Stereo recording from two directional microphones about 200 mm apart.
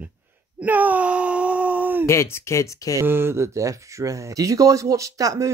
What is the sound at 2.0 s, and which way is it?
Speech, 15° left (ahead or behind).